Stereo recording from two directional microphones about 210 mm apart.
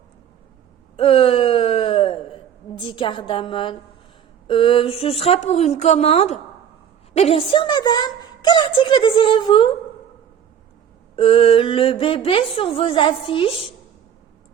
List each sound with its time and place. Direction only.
0.9 s a sound: 25° left (ahead or behind)
4.4 s a woman's voice: 25° left (ahead or behind)
11.2 s a woman's voice: 25° left (ahead or behind)